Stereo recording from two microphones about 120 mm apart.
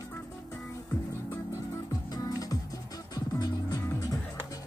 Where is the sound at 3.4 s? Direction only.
30° left (ahead or behind).